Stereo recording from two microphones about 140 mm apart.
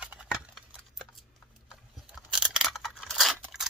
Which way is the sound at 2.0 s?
5° right (ahead or behind).